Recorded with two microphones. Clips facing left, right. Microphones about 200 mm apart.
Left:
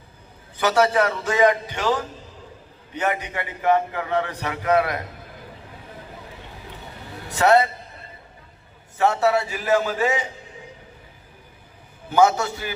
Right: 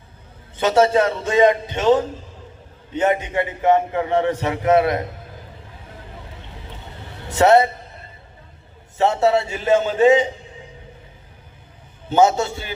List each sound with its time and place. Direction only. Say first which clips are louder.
0.5 s a man's voice: right 3 dB; 25° right (ahead or behind)
7.3 s a man's voice: right 4 dB; 25° right (ahead or behind)
9.0 s a man's voice: right 3 dB; 25° right (ahead or behind)
12.0 s a man's voice: right 2 dB; 25° right (ahead or behind)